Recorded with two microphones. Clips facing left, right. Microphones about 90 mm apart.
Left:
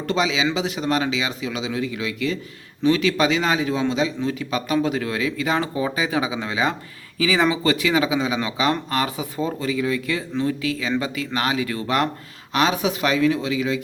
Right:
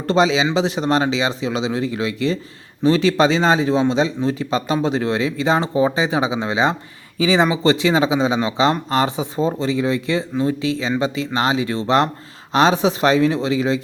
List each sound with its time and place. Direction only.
0.1 s speech: 35° right (ahead or behind)